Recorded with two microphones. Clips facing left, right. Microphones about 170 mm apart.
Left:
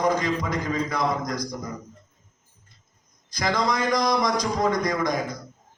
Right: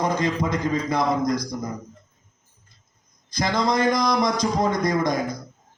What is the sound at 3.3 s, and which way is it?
A man's voice, 25° right (ahead or behind).